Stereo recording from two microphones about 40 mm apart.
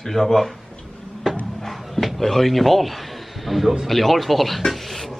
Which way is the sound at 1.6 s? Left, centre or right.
Centre.